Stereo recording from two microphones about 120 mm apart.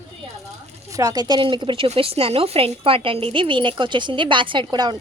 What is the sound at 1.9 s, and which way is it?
Speech, 55° right (ahead or behind).